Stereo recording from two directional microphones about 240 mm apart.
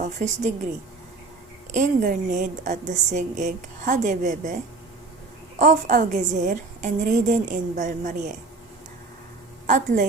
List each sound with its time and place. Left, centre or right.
0.0 s a woman's voice: right
1.7 s a woman's voice: right
5.5 s a woman's voice: right
9.6 s a woman's voice: right